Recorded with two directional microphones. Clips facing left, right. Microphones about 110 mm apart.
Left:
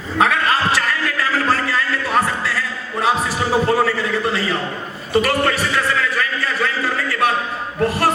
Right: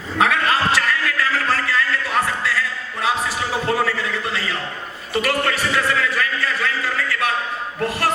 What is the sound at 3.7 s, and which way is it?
Speech, 35° left (ahead or behind).